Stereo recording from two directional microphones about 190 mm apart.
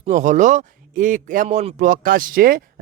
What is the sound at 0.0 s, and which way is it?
Speech, 40° right (ahead or behind).